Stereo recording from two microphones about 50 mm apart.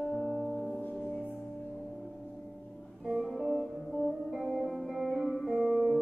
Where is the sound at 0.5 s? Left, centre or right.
Centre.